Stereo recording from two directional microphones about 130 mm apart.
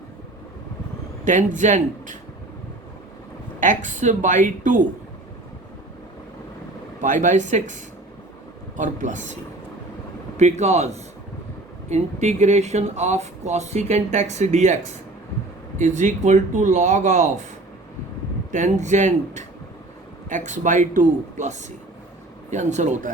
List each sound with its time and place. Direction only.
1.2 s speech: 75° right (ahead or behind)
3.6 s speech: 75° right (ahead or behind)
7.0 s speech: 70° right (ahead or behind)
18.5 s speech: 70° right (ahead or behind)